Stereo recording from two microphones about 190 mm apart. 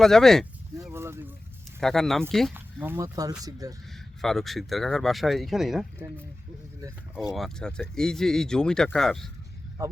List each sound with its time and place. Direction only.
0.0 s speech: centre (ahead or behind)
0.9 s a sound: 15° right (ahead or behind)
1.8 s speech: centre (ahead or behind)
2.8 s speech: 15° right (ahead or behind)
3.8 s speech: centre (ahead or behind)
7.3 s speech: 5° left (ahead or behind)
9.8 s speech: 15° right (ahead or behind)